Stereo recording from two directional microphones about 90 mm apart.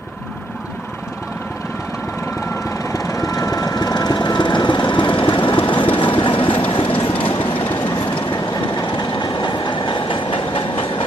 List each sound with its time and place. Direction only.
2.5 s vehicle: 40° left (ahead or behind); by 7.6 s 85° left
7.8 s train: 70° left (ahead or behind)
8.8 s train: 55° left (ahead or behind); by 11.1 s 80° left